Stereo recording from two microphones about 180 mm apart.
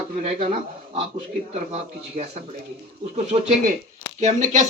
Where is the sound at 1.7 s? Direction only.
40° right (ahead or behind).